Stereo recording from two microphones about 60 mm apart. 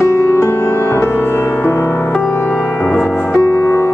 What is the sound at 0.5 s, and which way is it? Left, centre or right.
Music, left.